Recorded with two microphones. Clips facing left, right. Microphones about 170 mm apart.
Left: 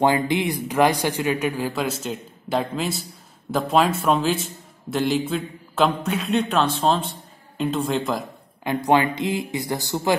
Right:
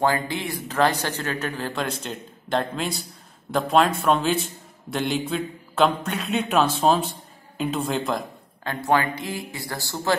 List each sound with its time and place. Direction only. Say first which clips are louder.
0.0 s a man's voice: left 4 dB; 20° left (ahead or behind); by 8.2 s centre (ahead or behind)
8.6 s speech: left 3 dB; 20° left (ahead or behind)